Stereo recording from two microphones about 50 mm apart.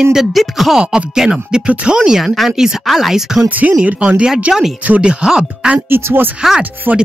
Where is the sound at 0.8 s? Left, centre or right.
Centre.